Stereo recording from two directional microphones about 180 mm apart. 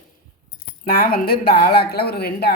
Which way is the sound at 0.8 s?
55° left (ahead or behind).